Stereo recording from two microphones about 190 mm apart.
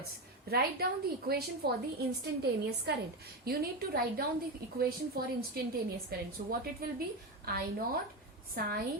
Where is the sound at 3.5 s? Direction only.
55° right (ahead or behind).